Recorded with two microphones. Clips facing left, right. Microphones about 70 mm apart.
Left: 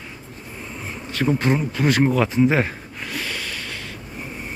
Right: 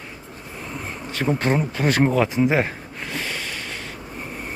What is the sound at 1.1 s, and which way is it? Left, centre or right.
Bee, right.